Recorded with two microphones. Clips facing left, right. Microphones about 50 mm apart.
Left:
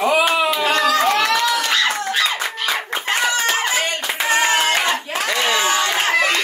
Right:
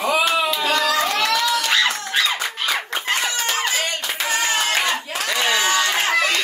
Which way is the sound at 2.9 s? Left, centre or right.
Left.